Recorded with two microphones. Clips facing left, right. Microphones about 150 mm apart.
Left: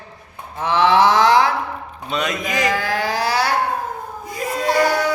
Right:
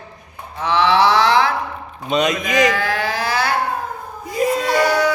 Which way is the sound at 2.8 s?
40° left (ahead or behind).